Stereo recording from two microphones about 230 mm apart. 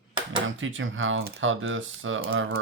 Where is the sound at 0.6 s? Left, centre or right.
Right.